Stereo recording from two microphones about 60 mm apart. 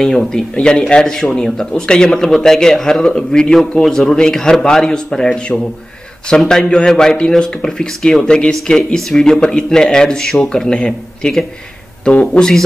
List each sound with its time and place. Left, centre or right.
0.0 s speech: centre